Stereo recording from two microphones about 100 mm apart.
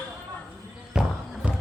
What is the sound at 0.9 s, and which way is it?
Basketball bounce, 5° right (ahead or behind).